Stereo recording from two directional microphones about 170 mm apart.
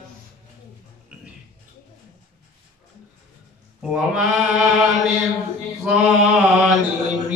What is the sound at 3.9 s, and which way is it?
Mantra, 5° right (ahead or behind).